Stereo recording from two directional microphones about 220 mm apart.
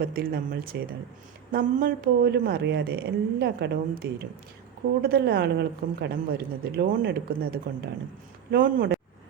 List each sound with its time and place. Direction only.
0.0 s a man's voice: 40° right (ahead or behind)